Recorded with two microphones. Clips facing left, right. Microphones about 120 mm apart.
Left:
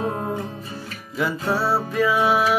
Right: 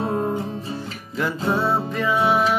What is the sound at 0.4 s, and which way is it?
Music, 25° right (ahead or behind).